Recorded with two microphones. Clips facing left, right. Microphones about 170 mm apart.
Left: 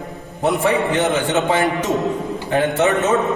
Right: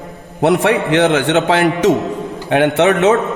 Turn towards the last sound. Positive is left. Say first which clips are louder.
# right 5 dB
turn(degrees=-70)  # may be behind; listen again after turning